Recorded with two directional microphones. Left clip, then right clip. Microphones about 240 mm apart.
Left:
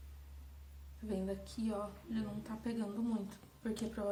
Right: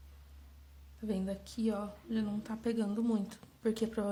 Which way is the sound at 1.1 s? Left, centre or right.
Right.